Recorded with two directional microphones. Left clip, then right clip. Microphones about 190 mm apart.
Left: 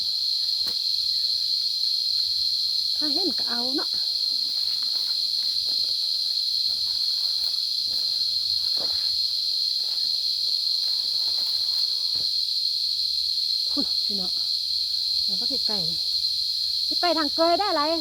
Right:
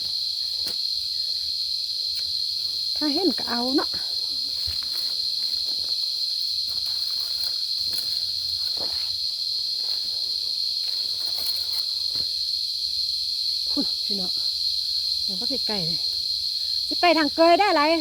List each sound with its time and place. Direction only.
17.0 s speech: 20° right (ahead or behind)